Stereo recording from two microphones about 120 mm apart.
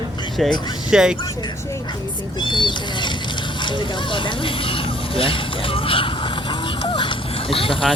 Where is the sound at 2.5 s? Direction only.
40° left (ahead or behind).